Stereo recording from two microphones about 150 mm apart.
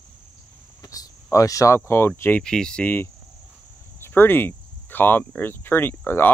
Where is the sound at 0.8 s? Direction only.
25° left (ahead or behind).